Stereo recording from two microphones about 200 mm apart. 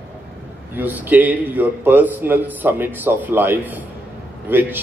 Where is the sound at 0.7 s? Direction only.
10° right (ahead or behind).